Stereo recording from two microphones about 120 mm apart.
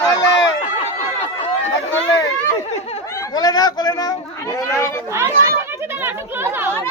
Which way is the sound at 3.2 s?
30° left (ahead or behind).